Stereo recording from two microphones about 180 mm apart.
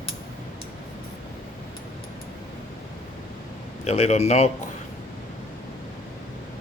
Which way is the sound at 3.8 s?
35° left (ahead or behind).